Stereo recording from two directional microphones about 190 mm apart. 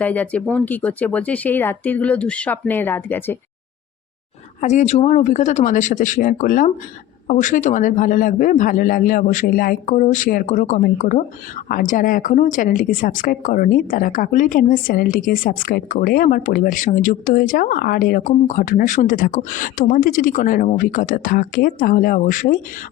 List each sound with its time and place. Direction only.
0.0 s speech: 5° left (ahead or behind)
4.6 s a woman's voice: 35° left (ahead or behind)